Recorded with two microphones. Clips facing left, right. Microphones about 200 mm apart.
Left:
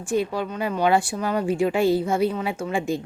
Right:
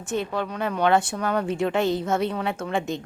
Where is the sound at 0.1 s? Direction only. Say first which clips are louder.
Left 3 dB; 5° left (ahead or behind).